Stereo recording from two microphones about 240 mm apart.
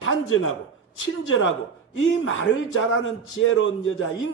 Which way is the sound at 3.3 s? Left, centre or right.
Left.